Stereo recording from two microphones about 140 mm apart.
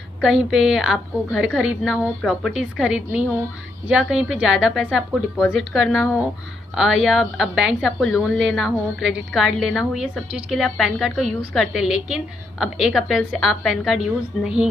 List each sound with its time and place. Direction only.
0.2 s a woman's voice: 5° right (ahead or behind)